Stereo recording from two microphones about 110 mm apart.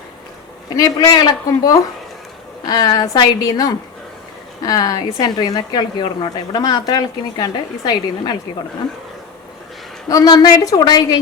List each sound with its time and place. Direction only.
0.8 s a woman's voice: 35° left (ahead or behind)
10.1 s a woman's voice: 35° left (ahead or behind)